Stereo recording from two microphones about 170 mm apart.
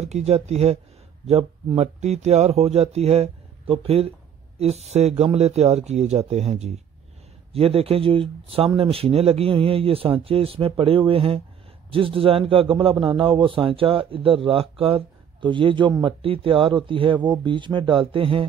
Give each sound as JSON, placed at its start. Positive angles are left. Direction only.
{"t": 0.0, "sound": "a man's voice", "side_deg": -40}